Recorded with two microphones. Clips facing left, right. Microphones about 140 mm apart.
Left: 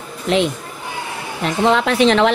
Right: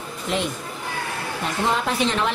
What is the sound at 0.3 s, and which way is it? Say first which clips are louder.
A woman's voice: left 8 dB; 90° left.